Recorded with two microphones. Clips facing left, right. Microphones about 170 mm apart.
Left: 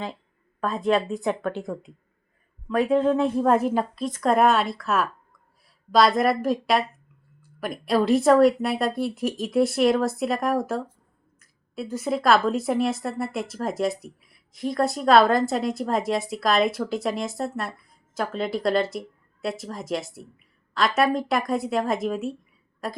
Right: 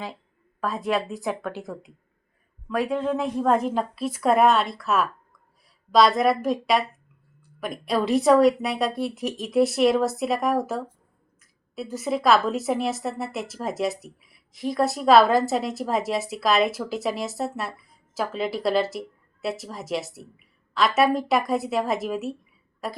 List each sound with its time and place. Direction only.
0.6 s speech: centre (ahead or behind)
3.9 s speech: 5° right (ahead or behind)